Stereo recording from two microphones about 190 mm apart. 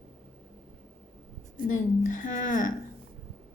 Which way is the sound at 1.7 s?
45° left (ahead or behind).